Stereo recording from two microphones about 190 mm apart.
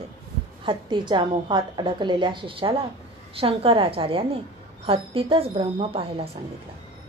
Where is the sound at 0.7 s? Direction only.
25° right (ahead or behind).